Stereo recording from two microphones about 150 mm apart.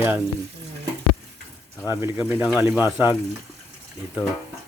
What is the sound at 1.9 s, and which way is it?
Speech, 15° right (ahead or behind).